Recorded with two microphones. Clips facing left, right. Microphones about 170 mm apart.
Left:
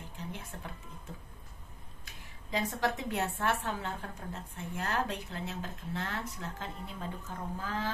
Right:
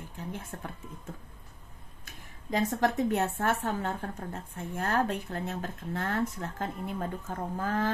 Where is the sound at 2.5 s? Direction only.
45° right (ahead or behind).